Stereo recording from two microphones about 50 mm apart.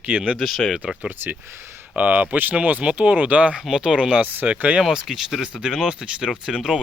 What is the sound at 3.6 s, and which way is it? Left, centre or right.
Speech, centre.